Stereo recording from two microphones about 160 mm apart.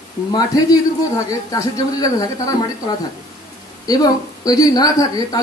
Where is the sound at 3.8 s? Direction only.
25° left (ahead or behind).